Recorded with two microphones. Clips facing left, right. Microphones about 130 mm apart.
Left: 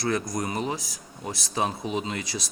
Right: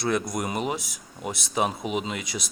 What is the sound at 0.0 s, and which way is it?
Speech, 25° right (ahead or behind).